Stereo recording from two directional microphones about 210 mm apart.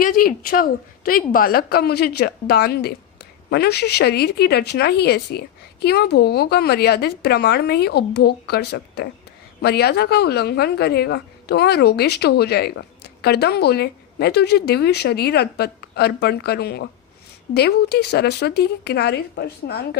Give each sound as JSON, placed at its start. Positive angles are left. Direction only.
{"t": 0.0, "sound": "a woman's voice", "side_deg": 45}